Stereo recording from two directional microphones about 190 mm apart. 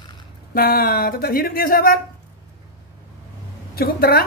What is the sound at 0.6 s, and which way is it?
Speech, 50° left (ahead or behind).